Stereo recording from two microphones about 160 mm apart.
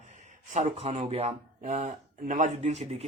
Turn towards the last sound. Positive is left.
turn(degrees=-40)  # may be behind; listen again after turning